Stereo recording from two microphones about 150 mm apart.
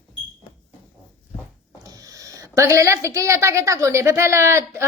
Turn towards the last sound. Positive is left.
turn(degrees=-15)  # may be behind; listen again after turning